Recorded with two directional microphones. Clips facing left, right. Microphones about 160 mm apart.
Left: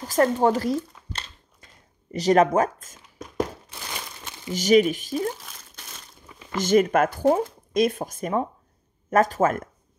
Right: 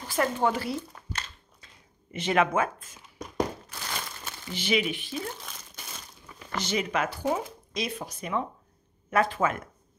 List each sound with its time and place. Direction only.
0.0 s speech: 40° left (ahead or behind)
2.0 s speech: 40° left (ahead or behind)
4.5 s speech: 40° left (ahead or behind)
5.3 s crumpling: centre (ahead or behind)
6.6 s speech: 50° left (ahead or behind)